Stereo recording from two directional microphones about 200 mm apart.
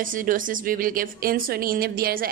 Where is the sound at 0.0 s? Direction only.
45° right (ahead or behind).